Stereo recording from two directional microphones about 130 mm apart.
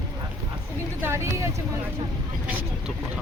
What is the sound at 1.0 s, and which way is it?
Speech, 20° right (ahead or behind).